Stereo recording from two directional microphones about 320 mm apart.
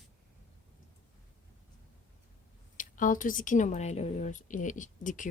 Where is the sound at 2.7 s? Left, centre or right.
Left.